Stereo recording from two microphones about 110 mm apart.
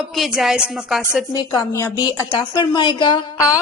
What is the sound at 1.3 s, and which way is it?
Speech, 35° left (ahead or behind).